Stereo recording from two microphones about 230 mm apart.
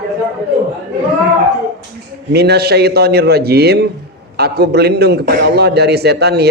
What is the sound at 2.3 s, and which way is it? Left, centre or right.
Speech, right.